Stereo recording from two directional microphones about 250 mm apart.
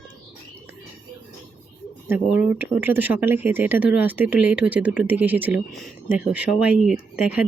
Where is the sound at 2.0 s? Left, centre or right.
Centre.